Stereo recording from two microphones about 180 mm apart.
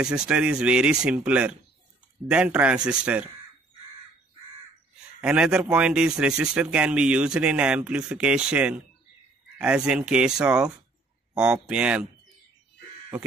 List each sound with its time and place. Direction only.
0.0 s speech: 5° right (ahead or behind)
5.2 s speech: 5° right (ahead or behind)